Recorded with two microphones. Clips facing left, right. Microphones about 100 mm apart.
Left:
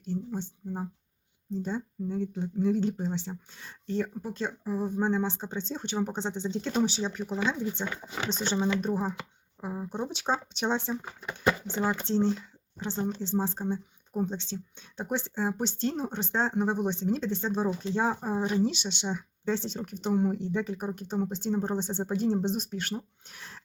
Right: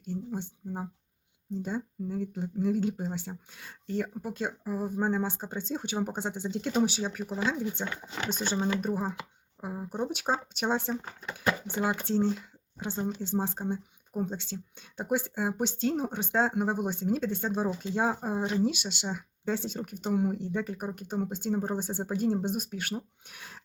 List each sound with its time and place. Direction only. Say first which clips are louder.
0.0 s speech: left 2 dB; 10° right (ahead or behind)
11.0 s speech: left 3 dB; 15° left (ahead or behind)
11.7 s speech: left 1 dB; 10° right (ahead or behind)